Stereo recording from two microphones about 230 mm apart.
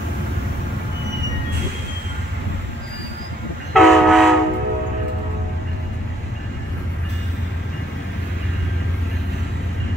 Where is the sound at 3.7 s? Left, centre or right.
Centre.